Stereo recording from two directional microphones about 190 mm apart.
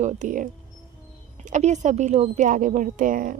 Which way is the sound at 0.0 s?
40° right (ahead or behind).